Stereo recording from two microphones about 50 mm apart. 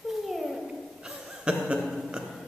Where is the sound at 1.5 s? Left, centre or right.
Centre.